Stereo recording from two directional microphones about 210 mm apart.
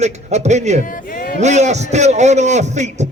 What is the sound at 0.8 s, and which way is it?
Speech, 40° left (ahead or behind).